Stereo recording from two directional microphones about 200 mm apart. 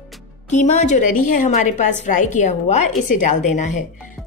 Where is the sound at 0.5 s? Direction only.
35° left (ahead or behind).